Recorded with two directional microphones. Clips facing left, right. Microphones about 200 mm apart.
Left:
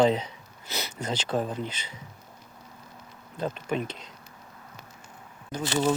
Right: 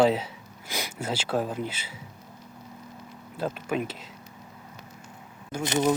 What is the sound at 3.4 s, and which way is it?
Speech, 5° right (ahead or behind).